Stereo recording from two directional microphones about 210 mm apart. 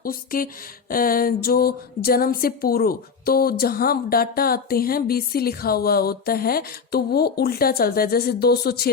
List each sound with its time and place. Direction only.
0.0 s speech: 45° left (ahead or behind)